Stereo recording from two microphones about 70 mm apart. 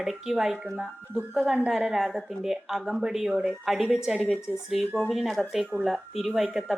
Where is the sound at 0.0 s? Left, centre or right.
Centre.